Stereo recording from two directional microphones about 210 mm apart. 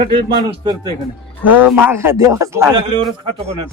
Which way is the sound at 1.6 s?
10° right (ahead or behind).